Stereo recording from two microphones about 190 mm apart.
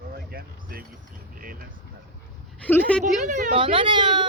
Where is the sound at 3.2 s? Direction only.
45° right (ahead or behind).